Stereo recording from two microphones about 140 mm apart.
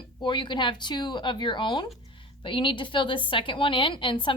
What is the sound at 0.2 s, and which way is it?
A woman's voice, 35° left (ahead or behind).